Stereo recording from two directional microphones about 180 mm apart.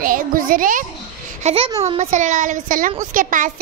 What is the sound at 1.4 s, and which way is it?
A child's voice, 30° right (ahead or behind).